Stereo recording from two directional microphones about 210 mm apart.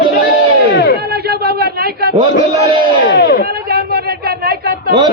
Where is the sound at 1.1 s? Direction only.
50° right (ahead or behind).